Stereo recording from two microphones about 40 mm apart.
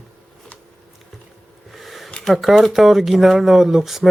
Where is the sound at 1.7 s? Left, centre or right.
Centre.